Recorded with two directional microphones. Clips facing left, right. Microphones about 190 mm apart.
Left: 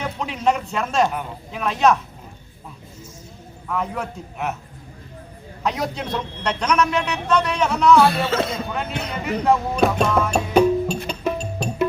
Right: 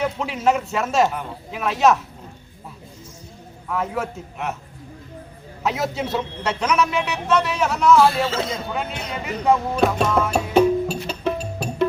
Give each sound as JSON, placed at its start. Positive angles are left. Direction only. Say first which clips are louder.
{"t": 0.0, "sound": "a man's voice", "louder": "right 1 dB", "side_deg": -5}
{"t": 3.7, "sound": "a man's voice", "louder": "right 1 dB", "side_deg": -5}
{"t": 5.6, "sound": "a man's voice", "louder": "right 1 dB", "side_deg": -5}
{"t": 8.3, "sound": "a man's voice", "louder": "left 3 dB", "side_deg": 60}
{"t": 8.5, "sound": "a man's voice", "louder": "left 1 dB", "side_deg": 0}
{"t": 11.6, "sound": "music", "louder": "left 3 dB", "side_deg": -5}